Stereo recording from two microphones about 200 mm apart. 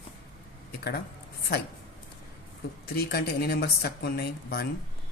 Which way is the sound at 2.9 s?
50° left (ahead or behind).